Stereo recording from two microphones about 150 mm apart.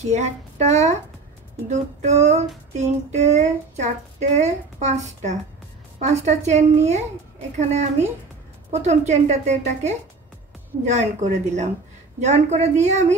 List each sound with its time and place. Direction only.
0.0 s a child's voice: 45° right (ahead or behind)